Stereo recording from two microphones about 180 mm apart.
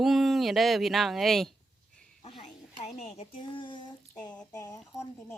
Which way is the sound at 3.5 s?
25° left (ahead or behind).